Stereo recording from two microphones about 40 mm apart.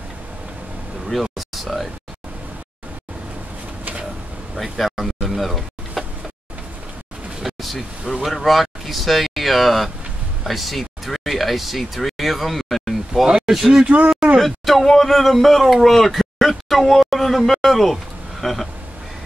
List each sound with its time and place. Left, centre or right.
1.0 s a sound: centre
4.7 s a sound: centre
7.4 s vehicle: centre
8.3 s speech: centre
13.8 s speech: right
14.4 s speech: centre